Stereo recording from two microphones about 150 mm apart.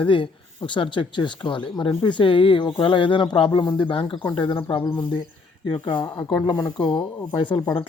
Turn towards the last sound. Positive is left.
turn(degrees=30)  # may be behind; listen again after turning